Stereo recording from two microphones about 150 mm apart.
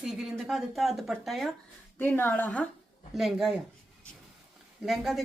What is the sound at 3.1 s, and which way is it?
Speech, centre (ahead or behind).